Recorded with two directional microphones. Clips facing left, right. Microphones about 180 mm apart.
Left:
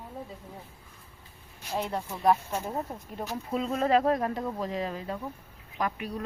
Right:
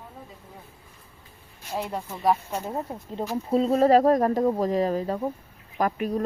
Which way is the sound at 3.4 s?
35° right (ahead or behind).